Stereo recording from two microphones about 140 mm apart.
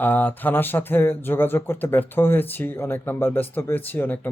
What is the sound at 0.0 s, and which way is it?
Speech, 15° left (ahead or behind).